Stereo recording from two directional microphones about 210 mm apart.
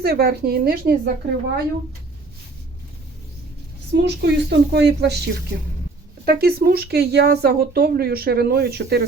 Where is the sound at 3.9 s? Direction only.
55° right (ahead or behind).